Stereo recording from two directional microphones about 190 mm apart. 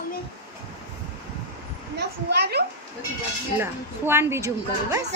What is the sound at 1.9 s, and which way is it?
Speech, 60° right (ahead or behind).